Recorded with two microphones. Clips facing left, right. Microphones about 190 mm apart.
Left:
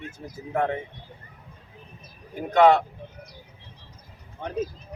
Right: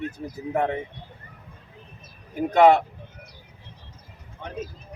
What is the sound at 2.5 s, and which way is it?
Speech, 15° right (ahead or behind).